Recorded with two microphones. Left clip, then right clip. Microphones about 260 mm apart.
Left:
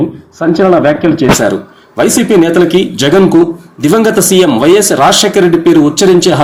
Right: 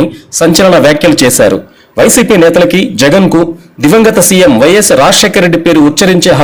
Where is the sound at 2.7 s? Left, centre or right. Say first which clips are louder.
Right 2 dB; right.